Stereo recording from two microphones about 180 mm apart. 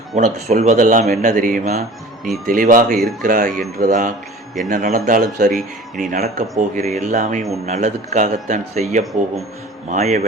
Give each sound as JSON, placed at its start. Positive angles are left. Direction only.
{"t": 0.2, "sound": "speech", "side_deg": -40}
{"t": 3.0, "sound": "speech", "side_deg": 0}
{"t": 3.2, "sound": "a man's voice", "side_deg": -50}